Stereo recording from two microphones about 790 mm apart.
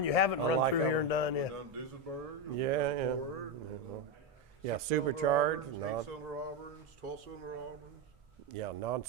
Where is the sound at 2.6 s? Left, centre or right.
Right.